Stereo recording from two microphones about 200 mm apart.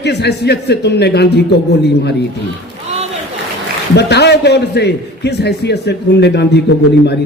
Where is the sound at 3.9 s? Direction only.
55° left (ahead or behind).